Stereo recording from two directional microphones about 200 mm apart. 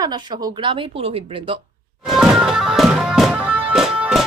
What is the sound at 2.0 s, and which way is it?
Music, centre (ahead or behind).